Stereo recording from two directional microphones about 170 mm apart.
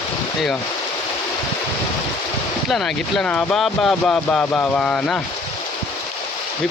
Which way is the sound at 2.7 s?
Centre (ahead or behind).